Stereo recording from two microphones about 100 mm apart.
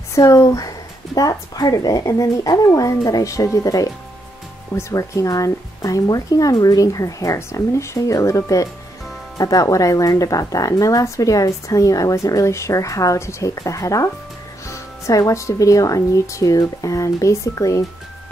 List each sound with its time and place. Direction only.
0.1 s speech: 35° left (ahead or behind)